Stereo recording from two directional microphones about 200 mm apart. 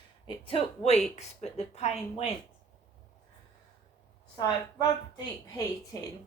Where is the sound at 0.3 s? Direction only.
25° left (ahead or behind).